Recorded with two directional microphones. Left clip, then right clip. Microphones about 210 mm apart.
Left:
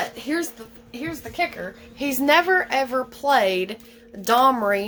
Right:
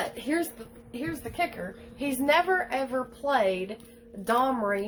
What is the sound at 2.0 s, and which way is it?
Speech, 40° left (ahead or behind).